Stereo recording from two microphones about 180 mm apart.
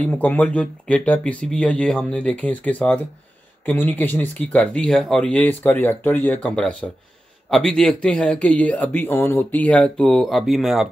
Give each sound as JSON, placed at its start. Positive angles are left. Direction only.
{"t": 0.0, "sound": "speech", "side_deg": 10}